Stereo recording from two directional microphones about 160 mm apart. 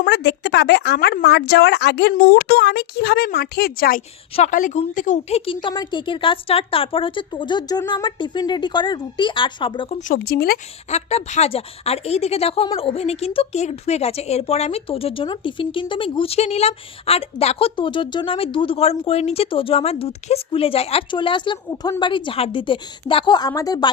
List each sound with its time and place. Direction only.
0.0 s a woman's voice: 90° left; by 4.0 s 65° left (ahead or behind)
4.4 s a woman's voice: 50° left (ahead or behind)
5.6 s a woman's voice: 25° left (ahead or behind)
10.0 s speech: 65° left (ahead or behind)
10.8 s a woman's voice: 45° left (ahead or behind); by 23.9 s 25° left (ahead or behind)